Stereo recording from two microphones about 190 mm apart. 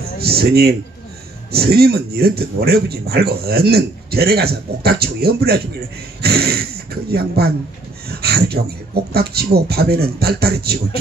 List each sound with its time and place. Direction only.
0.2 s speech: 55° right (ahead or behind)